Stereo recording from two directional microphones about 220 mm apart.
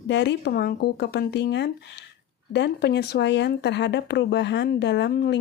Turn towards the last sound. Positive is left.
turn(degrees=50)  # may be behind; listen again after turning